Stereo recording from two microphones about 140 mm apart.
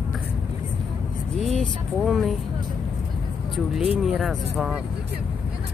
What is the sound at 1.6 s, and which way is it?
Speech, centre (ahead or behind).